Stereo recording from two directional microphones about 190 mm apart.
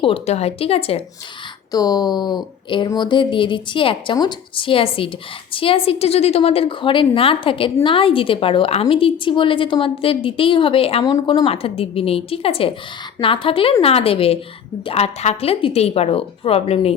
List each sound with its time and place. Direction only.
0.0 s a woman's voice: 30° left (ahead or behind)
1.7 s a woman's voice: 20° left (ahead or behind)